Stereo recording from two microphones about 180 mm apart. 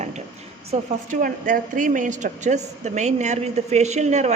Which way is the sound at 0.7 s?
45° right (ahead or behind).